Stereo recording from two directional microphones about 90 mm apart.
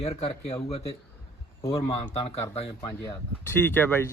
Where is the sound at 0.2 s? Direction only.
90° left.